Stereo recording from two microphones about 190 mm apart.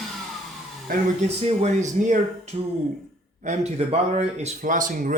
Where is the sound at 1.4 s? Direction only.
35° right (ahead or behind).